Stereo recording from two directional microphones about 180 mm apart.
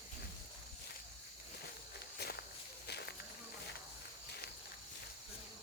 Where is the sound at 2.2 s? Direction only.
65° left (ahead or behind).